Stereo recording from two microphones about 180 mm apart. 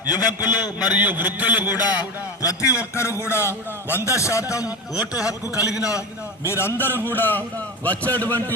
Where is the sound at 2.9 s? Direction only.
15° left (ahead or behind).